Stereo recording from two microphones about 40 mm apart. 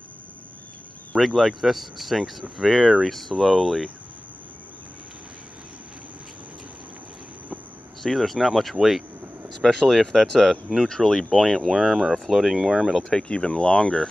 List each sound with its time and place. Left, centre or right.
1.2 s speech: centre
3.1 s speech: centre
8.0 s speech: centre
9.6 s speech: centre
13.3 s speech: left